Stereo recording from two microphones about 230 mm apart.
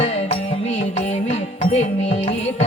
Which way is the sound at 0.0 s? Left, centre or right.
Left.